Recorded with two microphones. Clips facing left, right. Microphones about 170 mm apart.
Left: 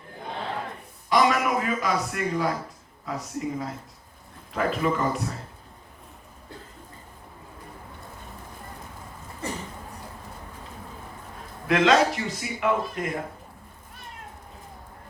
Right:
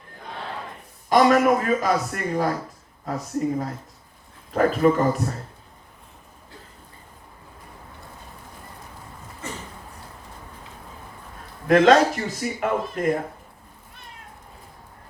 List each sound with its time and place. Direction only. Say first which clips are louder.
1.1 s speech: right 5 dB; 45° right (ahead or behind)
11.7 s speech: right 5 dB; 45° right (ahead or behind)